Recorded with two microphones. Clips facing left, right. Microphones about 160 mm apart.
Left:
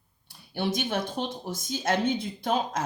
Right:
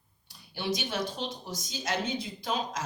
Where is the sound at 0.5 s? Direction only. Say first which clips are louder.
Left 4 dB; 55° left (ahead or behind).